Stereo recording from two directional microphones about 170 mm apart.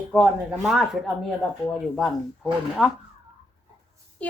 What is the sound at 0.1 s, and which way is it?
Speech, 5° right (ahead or behind).